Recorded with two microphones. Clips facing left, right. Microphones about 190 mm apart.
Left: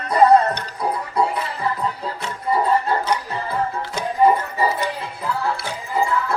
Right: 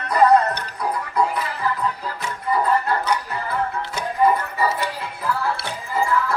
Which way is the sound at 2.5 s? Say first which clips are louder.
Left 1 dB; 25° left (ahead or behind).